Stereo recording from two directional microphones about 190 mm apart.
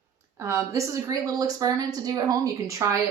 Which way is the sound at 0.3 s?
15° right (ahead or behind).